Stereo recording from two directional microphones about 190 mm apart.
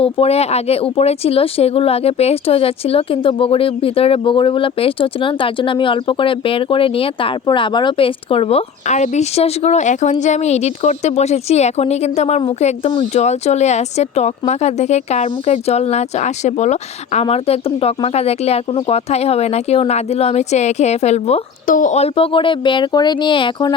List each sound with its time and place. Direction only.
0.0 s speech: 30° left (ahead or behind)